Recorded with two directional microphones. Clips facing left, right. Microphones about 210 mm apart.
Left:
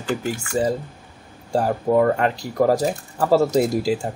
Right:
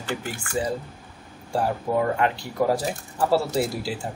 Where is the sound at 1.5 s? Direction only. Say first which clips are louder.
Left 5 dB; 45° left (ahead or behind).